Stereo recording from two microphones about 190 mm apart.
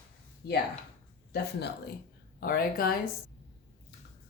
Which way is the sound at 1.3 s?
60° left (ahead or behind).